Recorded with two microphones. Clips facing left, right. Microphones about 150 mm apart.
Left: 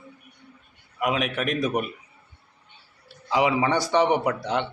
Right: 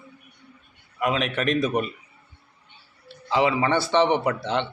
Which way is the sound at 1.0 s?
10° left (ahead or behind).